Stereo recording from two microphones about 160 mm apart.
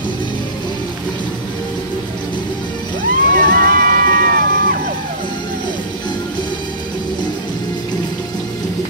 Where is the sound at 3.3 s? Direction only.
65° right (ahead or behind).